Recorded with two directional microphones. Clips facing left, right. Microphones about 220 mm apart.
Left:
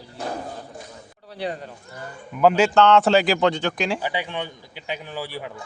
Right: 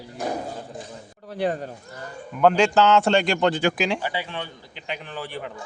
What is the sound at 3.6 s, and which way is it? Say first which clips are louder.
Speech: right 3 dB; 10° right (ahead or behind).